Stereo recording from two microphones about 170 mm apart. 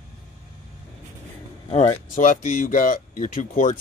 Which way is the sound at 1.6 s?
40° left (ahead or behind).